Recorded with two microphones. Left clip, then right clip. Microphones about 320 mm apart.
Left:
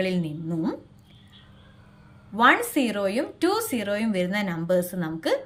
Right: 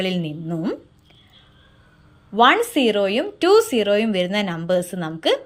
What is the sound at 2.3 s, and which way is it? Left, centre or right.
A woman's voice, centre.